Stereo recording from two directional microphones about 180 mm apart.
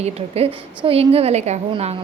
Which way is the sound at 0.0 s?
35° right (ahead or behind).